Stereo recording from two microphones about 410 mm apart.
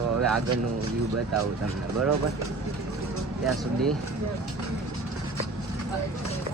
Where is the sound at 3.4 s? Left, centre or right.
Centre.